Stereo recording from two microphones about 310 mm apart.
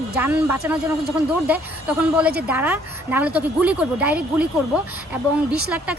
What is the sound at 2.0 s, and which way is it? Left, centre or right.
Speech, centre.